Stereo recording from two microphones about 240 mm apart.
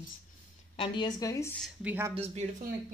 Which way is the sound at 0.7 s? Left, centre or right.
Left.